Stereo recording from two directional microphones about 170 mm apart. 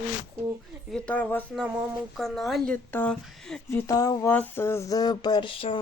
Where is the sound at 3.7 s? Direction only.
20° left (ahead or behind).